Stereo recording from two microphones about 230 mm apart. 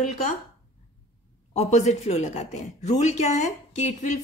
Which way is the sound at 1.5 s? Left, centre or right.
Left.